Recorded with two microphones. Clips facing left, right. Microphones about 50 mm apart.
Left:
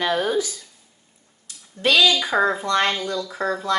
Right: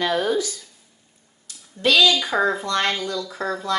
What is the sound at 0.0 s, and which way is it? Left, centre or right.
Speech, centre.